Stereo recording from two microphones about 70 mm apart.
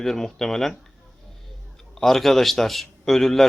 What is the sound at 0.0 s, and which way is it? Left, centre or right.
Speech, centre.